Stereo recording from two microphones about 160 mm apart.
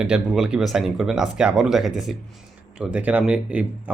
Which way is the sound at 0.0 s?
5° right (ahead or behind).